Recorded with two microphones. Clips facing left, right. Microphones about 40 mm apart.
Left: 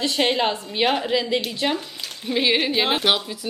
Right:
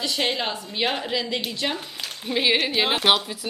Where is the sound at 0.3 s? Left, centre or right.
Left.